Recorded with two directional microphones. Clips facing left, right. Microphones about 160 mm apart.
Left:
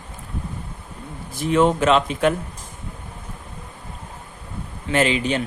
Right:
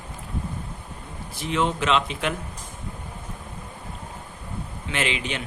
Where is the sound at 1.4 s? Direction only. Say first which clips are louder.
Left 7 dB; 45° left (ahead or behind).